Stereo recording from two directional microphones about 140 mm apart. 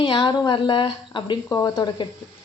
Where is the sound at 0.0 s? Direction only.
35° left (ahead or behind).